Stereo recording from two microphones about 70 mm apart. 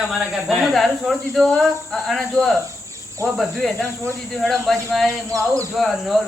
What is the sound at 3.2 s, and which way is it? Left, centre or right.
Cricket, right.